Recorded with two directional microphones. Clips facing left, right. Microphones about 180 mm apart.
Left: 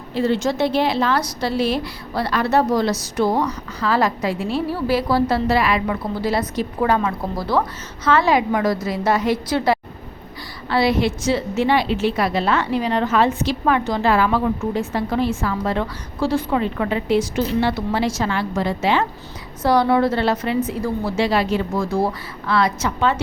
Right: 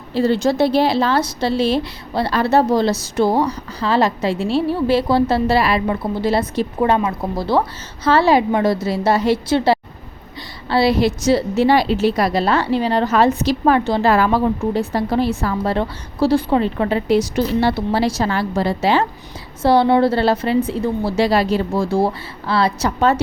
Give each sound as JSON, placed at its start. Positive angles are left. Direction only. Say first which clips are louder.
{"t": 0.1, "sound": "a woman's voice", "louder": "right 3 dB", "side_deg": -35}